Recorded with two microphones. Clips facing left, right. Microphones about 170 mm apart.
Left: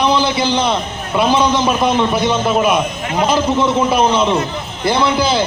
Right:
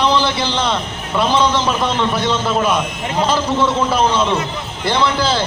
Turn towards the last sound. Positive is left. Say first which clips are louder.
# left 2 dB
turn(degrees=15)  # may be behind; listen again after turning